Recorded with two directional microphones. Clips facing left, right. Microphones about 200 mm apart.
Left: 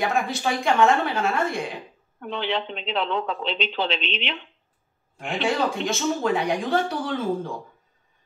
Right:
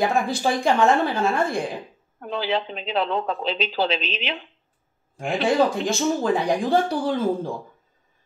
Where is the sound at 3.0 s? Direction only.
40° right (ahead or behind).